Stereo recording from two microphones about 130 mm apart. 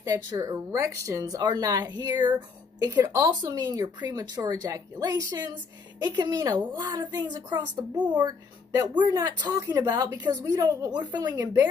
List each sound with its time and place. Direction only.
0.0 s a woman's voice: 30° right (ahead or behind)